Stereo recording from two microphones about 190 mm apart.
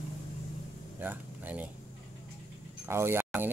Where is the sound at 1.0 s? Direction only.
10° right (ahead or behind).